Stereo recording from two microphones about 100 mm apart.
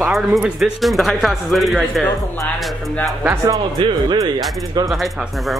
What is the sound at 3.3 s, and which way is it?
Speech, 35° right (ahead or behind).